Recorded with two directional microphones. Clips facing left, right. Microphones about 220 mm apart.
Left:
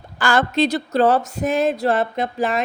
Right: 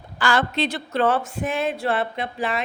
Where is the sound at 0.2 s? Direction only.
45° left (ahead or behind).